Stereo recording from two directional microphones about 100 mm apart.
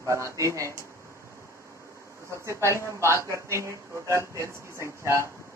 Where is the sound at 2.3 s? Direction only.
30° right (ahead or behind).